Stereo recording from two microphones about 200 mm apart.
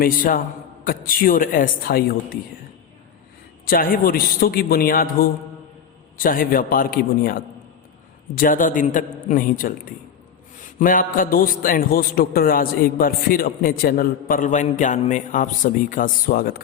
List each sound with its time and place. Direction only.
0.0 s a man's voice: 45° left (ahead or behind)
3.7 s a man's voice: 45° left (ahead or behind)